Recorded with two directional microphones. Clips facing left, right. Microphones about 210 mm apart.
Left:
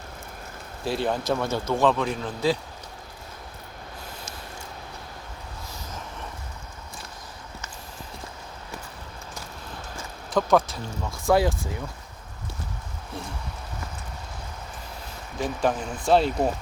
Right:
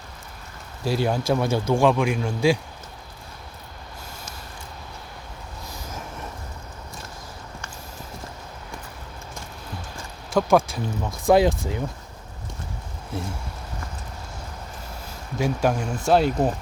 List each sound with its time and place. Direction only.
0.9 s speech: 5° right (ahead or behind)
10.3 s speech: 10° right (ahead or behind)
15.4 s speech: 10° right (ahead or behind)